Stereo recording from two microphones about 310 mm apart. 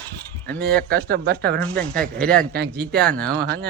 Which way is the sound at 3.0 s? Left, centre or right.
Centre.